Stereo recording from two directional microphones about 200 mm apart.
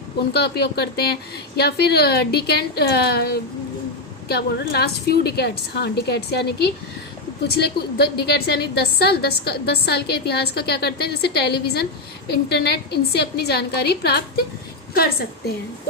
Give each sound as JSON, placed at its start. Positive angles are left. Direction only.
{"t": 0.3, "sound": "a woman's voice", "side_deg": 55}